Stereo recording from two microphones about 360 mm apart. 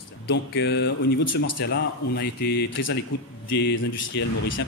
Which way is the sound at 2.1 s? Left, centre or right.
Left.